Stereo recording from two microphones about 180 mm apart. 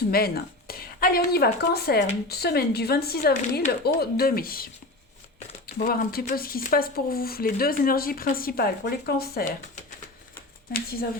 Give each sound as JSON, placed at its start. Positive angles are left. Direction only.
{"t": 0.1, "sound": "speech", "side_deg": 55}